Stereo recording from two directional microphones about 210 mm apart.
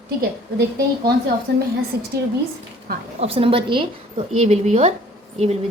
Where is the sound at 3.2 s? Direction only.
25° right (ahead or behind).